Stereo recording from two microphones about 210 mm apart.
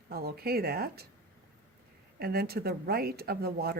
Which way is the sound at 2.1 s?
45° right (ahead or behind).